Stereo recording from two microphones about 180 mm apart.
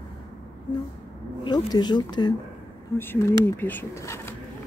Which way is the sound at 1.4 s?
25° left (ahead or behind).